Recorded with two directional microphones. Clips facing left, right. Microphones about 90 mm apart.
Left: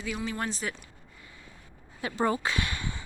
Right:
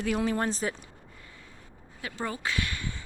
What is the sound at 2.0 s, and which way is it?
Speech, 25° left (ahead or behind).